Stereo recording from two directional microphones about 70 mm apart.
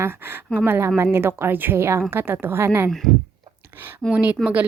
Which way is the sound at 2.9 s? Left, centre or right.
Centre.